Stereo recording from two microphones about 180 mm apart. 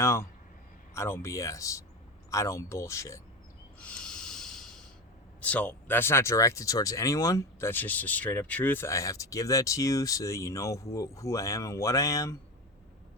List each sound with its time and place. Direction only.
0.0 s speech: 15° left (ahead or behind)
3.8 s snort: 5° left (ahead or behind)
5.4 s speech: 10° left (ahead or behind)